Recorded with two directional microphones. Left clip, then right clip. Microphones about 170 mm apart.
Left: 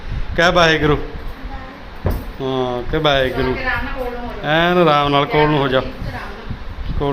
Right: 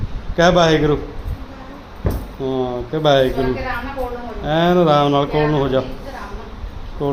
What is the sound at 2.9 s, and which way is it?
Speech, 15° right (ahead or behind).